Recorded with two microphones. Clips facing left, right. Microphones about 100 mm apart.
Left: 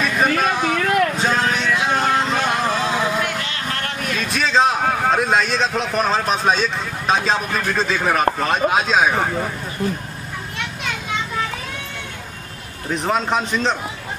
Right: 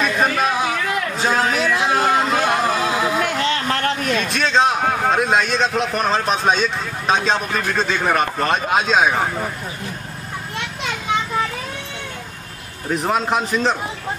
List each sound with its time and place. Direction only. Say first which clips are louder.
0.0 s a sound: even; centre (ahead or behind)
1.1 s vehicle: right 1 dB; 5° right (ahead or behind)
4.2 s a man's voice: left 2 dB; centre (ahead or behind)
12.9 s a man's voice: right 1 dB; 5° right (ahead or behind)